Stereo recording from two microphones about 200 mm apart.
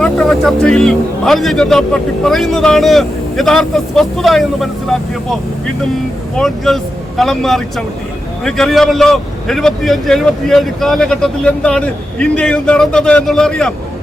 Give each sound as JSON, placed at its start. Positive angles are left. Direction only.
{"t": 0.0, "sound": "a man's voice", "side_deg": 0}